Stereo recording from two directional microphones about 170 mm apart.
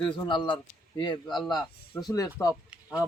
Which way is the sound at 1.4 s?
5° left (ahead or behind).